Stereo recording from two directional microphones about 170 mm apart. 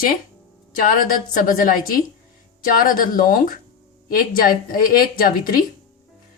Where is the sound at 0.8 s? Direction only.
60° left (ahead or behind).